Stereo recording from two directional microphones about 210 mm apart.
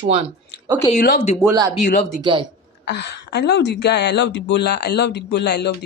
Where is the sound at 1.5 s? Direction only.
15° right (ahead or behind).